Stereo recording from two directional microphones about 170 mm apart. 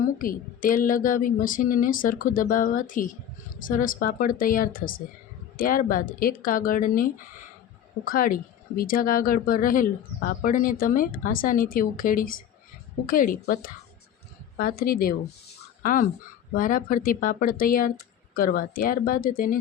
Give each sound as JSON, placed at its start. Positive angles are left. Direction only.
{"t": 0.2, "sound": "speech", "side_deg": 55}